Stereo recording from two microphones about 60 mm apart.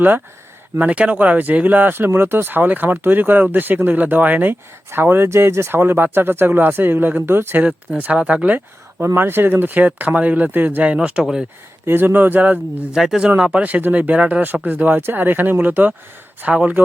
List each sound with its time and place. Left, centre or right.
0.8 s speech: right
7.6 s speech: right
9.1 s speech: right
10.8 s speech: centre
11.9 s speech: right
12.9 s speech: centre